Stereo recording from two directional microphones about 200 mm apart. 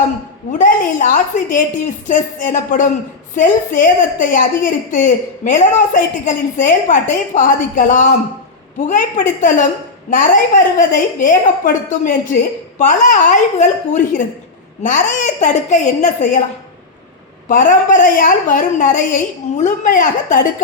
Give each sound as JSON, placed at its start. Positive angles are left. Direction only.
{"t": 0.6, "sound": "a woman's voice", "side_deg": 40}
{"t": 10.8, "sound": "a woman's voice", "side_deg": 40}
{"t": 17.5, "sound": "a woman's voice", "side_deg": 40}